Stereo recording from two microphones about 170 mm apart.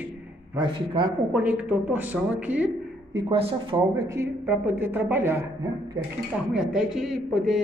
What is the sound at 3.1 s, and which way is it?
A man's voice, 30° right (ahead or behind).